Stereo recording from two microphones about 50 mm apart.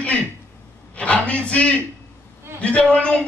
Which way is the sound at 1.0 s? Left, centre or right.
Left.